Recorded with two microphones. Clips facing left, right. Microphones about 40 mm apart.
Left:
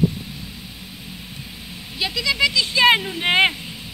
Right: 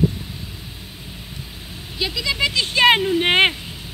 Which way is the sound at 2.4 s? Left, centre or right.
Right.